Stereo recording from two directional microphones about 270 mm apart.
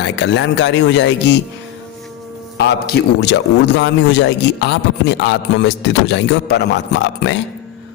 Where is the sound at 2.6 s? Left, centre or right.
Left.